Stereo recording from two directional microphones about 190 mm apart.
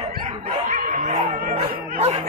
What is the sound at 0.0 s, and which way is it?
Snicker, 35° right (ahead or behind).